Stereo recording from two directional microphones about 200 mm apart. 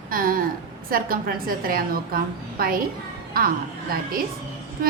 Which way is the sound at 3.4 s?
45° right (ahead or behind).